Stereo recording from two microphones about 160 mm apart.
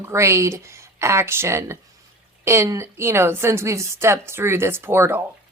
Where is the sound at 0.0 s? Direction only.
15° right (ahead or behind).